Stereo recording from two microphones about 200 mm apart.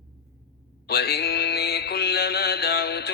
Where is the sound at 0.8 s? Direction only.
55° left (ahead or behind).